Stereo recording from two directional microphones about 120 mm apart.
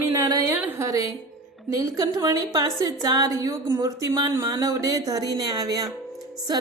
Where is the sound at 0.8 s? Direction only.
30° right (ahead or behind).